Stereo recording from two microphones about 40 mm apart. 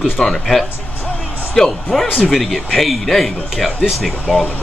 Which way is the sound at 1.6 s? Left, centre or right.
Centre.